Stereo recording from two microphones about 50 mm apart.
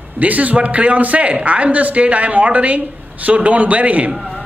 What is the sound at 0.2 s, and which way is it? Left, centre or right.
A man's voice, right.